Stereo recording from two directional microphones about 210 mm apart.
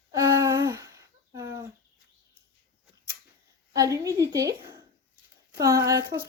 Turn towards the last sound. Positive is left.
turn(degrees=-15)  # may be behind; listen again after turning